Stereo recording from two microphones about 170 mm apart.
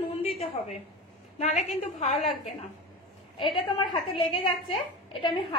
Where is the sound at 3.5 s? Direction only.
30° left (ahead or behind).